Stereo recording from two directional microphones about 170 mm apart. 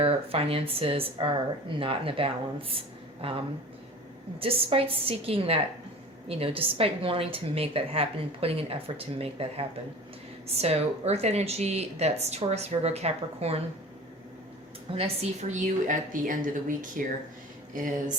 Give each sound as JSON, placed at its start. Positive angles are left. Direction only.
{"t": 0.0, "sound": "a woman's voice", "side_deg": -35}
{"t": 4.4, "sound": "a woman's voice", "side_deg": -35}
{"t": 14.9, "sound": "a woman's voice", "side_deg": -35}